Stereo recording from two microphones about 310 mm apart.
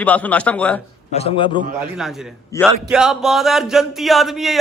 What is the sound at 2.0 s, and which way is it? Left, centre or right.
A man's voice, centre.